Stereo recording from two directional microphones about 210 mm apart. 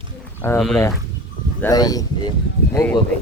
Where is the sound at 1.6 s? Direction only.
15° left (ahead or behind).